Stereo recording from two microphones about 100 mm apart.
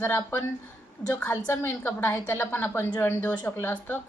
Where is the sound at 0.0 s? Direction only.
25° left (ahead or behind).